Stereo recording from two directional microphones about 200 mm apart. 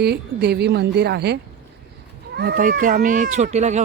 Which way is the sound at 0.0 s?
55° right (ahead or behind).